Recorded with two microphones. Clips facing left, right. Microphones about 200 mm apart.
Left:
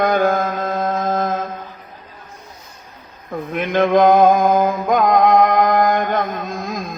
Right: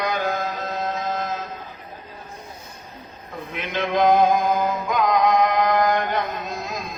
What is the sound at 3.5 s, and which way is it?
Music, 50° left (ahead or behind).